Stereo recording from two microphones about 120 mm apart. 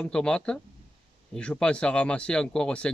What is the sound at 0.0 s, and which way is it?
Speech, 5° left (ahead or behind).